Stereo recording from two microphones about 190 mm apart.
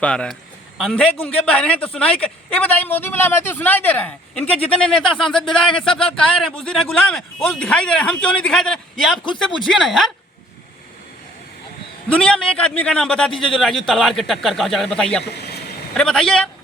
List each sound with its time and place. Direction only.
0.0 s speech: 5° left (ahead or behind)
12.2 s speech: 5° left (ahead or behind)
15.2 s speech: 60° left (ahead or behind)
16.0 s speech: 5° left (ahead or behind)